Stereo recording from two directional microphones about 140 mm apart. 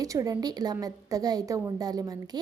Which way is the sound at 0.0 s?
25° right (ahead or behind).